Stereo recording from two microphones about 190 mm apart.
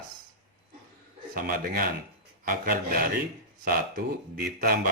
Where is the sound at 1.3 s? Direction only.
45° right (ahead or behind).